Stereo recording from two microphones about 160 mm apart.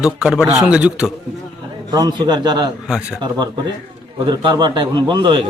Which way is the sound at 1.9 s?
25° right (ahead or behind).